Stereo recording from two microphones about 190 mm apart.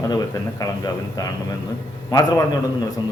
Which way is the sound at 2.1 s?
15° left (ahead or behind).